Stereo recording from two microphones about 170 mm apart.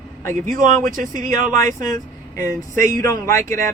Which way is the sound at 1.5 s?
20° left (ahead or behind).